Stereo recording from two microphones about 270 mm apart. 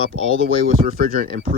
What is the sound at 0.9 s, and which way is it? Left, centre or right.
Speech, right.